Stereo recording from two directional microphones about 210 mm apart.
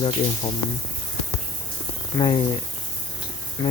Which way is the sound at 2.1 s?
20° left (ahead or behind).